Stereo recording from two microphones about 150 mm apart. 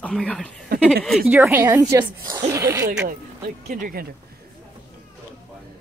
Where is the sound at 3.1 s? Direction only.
85° right.